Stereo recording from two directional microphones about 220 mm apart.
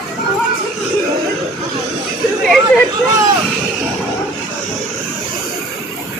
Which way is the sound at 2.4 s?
Centre (ahead or behind).